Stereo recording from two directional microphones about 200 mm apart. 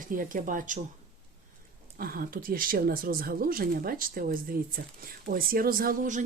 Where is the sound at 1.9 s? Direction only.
45° right (ahead or behind).